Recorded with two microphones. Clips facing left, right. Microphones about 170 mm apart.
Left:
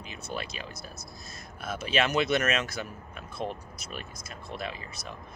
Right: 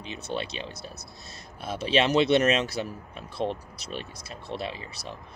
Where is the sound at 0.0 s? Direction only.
30° right (ahead or behind).